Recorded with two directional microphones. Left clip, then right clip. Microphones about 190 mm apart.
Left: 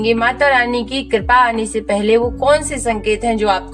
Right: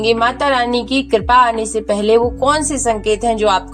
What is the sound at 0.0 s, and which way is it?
Speech, 30° right (ahead or behind).